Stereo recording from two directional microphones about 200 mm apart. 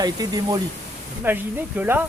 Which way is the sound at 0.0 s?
20° right (ahead or behind).